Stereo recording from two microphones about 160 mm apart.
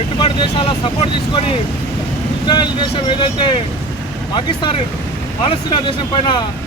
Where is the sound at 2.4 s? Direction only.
30° left (ahead or behind).